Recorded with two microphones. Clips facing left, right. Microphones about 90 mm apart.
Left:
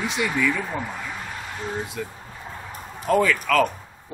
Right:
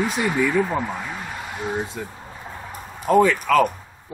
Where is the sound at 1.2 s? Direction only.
5° right (ahead or behind).